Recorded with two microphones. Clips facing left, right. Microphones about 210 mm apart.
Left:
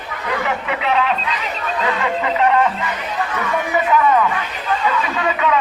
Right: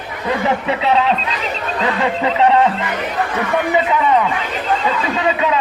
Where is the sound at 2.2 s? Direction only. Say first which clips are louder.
Right 3 dB; 30° right (ahead or behind).